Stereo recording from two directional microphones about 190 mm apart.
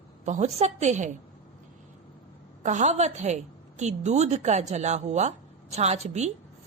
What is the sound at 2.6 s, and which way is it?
A woman's voice, 40° right (ahead or behind).